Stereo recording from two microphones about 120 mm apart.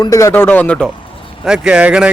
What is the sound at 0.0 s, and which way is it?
Speech, 25° left (ahead or behind).